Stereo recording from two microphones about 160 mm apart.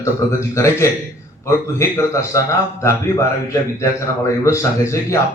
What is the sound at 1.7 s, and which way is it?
A man's voice, 15° left (ahead or behind).